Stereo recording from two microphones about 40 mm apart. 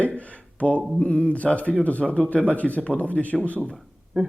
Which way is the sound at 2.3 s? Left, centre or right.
Left.